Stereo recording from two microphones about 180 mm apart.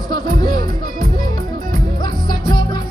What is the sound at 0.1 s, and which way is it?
Music, 20° left (ahead or behind).